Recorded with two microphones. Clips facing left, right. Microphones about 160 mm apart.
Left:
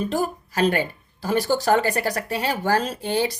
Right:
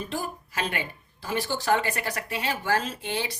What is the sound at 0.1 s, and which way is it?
Speech, 40° left (ahead or behind).